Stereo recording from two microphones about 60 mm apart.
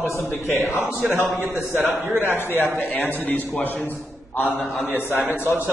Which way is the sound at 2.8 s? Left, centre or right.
Left.